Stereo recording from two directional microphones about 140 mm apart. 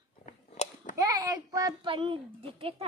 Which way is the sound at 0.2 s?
65° left (ahead or behind).